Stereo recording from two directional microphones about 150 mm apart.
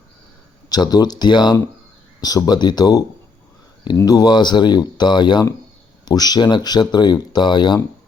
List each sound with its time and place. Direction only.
0.7 s speech: 25° left (ahead or behind)